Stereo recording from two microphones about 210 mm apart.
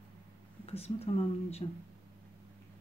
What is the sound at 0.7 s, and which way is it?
Speech, 30° left (ahead or behind).